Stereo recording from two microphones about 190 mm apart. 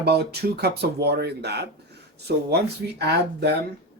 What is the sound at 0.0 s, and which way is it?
Speech, 60° right (ahead or behind).